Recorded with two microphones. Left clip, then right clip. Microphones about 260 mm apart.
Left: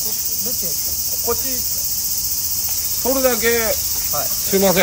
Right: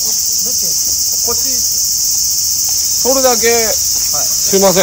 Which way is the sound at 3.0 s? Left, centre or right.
Right.